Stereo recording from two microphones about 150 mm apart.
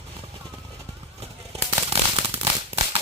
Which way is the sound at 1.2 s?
40° right (ahead or behind).